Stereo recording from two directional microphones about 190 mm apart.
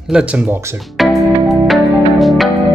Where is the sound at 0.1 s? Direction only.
5° right (ahead or behind).